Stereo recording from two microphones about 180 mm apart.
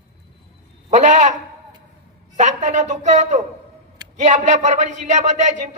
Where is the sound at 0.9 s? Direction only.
40° right (ahead or behind).